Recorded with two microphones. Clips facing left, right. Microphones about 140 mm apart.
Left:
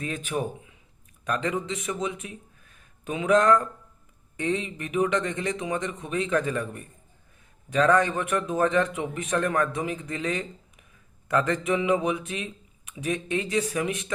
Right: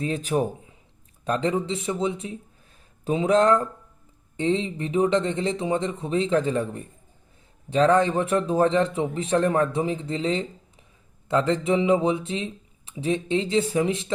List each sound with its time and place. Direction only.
0.0 s speech: 35° right (ahead or behind)